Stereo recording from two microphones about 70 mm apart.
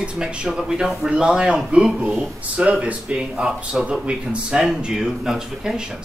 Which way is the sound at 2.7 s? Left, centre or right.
Centre.